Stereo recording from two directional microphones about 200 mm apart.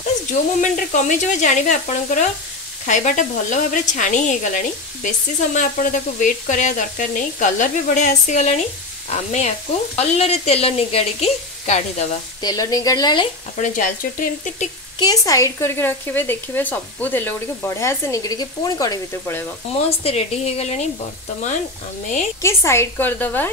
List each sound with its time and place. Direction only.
0.3 s speech: 40° left (ahead or behind)
12.4 s speech: 20° left (ahead or behind)
13.6 s speech: 40° left (ahead or behind)
15.0 s speech: 20° left (ahead or behind)
19.9 s speech: 30° left (ahead or behind)
22.4 s speech: 15° left (ahead or behind)